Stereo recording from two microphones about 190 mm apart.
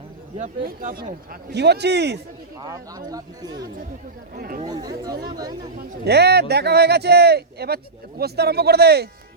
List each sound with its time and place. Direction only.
0.3 s speech: 40° right (ahead or behind); by 2.2 s 60° right (ahead or behind)
2.6 s speech: 20° right (ahead or behind)
4.4 s speech: 50° right (ahead or behind)
4.6 s speech: 20° right (ahead or behind)
6.1 s speech: 60° right (ahead or behind)